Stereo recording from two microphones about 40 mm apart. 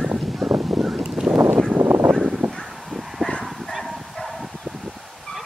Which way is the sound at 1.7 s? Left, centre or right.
Right.